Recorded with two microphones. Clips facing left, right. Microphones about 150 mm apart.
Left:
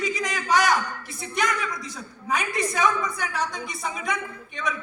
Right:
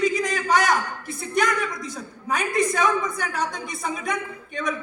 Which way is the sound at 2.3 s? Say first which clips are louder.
Right 3 dB; 50° right (ahead or behind).